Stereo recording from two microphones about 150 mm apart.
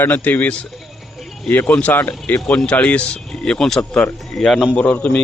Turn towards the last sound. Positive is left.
turn(degrees=10)  # may be behind; listen again after turning